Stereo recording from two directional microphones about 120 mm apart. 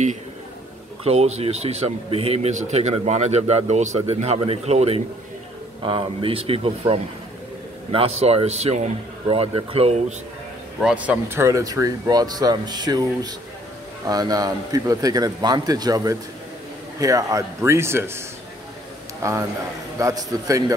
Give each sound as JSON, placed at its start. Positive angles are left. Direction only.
{"t": 1.0, "sound": "speech", "side_deg": -65}
{"t": 5.8, "sound": "speech", "side_deg": -45}
{"t": 7.9, "sound": "speech", "side_deg": -55}
{"t": 10.8, "sound": "speech", "side_deg": -10}
{"t": 20.0, "sound": "speech", "side_deg": -25}